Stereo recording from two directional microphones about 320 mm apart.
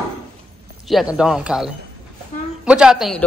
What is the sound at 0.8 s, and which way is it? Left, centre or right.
A man's voice, centre.